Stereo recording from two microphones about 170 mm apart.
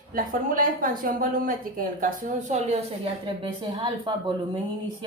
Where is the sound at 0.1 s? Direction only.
55° right (ahead or behind).